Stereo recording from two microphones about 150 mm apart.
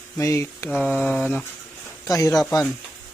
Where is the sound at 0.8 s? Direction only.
10° left (ahead or behind).